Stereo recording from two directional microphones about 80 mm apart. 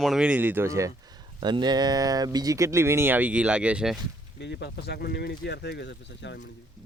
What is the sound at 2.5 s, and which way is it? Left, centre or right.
Speech, right.